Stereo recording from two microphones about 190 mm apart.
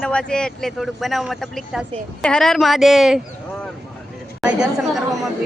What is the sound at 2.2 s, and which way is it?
Speech, 5° left (ahead or behind).